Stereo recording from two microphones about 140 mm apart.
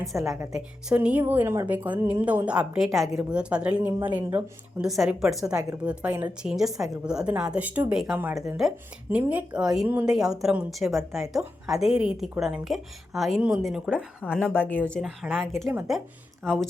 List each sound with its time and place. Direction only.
0.1 s a woman's voice: centre (ahead or behind)
4.8 s a woman's voice: 5° right (ahead or behind)
14.5 s a woman's voice: 15° left (ahead or behind)
15.0 s a woman's voice: centre (ahead or behind)
15.6 s speech: 20° right (ahead or behind)